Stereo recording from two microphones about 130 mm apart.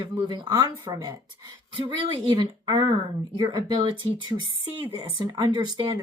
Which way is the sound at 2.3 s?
40° right (ahead or behind).